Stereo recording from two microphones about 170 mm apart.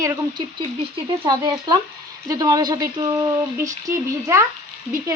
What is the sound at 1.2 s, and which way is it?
Speech, 25° right (ahead or behind).